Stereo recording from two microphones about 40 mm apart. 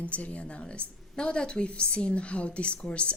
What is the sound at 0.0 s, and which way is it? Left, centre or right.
A woman's voice, left.